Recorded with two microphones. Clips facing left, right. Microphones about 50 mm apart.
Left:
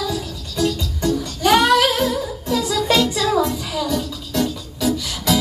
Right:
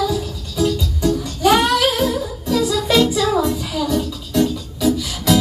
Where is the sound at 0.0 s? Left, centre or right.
Centre.